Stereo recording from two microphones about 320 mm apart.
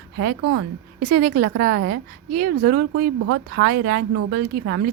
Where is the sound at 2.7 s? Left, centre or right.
Right.